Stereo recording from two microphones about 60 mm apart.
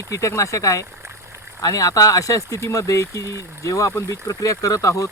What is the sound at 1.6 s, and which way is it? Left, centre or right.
Speech, left.